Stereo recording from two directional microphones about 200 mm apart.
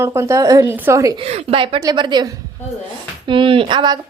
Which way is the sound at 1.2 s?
30° right (ahead or behind).